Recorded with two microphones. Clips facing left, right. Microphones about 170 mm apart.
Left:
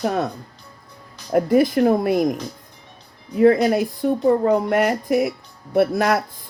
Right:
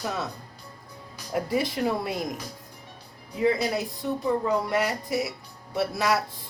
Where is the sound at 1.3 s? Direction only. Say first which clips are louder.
Left 10 dB; 55° left (ahead or behind).